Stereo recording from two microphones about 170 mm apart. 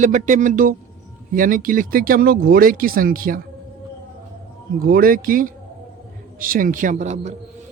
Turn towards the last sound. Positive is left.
turn(degrees=-45)  # may be behind; listen again after turning